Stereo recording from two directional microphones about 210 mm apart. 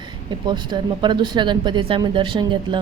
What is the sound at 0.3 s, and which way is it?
Speech, 20° right (ahead or behind).